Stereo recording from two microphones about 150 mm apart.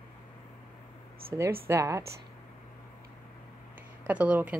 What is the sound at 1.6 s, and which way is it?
Speech, 20° right (ahead or behind).